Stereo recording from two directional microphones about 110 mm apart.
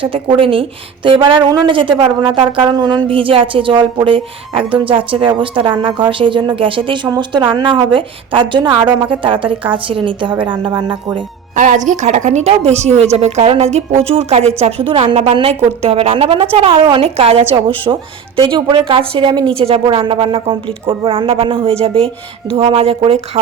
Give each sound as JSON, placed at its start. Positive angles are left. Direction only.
{"t": 0.0, "sound": "speech", "side_deg": -55}
{"t": 11.9, "sound": "speech", "side_deg": -90}
{"t": 18.3, "sound": "speech", "side_deg": -45}
{"t": 19.5, "sound": "speech", "side_deg": -60}